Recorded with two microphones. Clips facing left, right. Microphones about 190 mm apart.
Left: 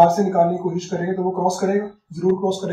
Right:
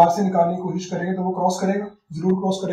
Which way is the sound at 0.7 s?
Centre (ahead or behind).